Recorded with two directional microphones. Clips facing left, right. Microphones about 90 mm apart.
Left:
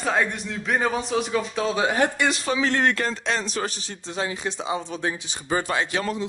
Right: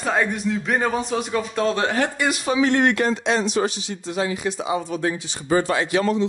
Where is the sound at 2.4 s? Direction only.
35° right (ahead or behind).